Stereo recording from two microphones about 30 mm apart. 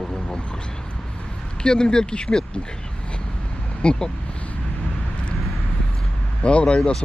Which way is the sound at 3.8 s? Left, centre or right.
Left.